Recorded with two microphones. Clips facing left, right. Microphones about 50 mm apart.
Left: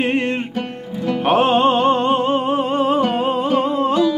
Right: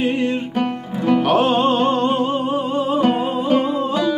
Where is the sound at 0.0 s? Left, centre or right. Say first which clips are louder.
Even; left.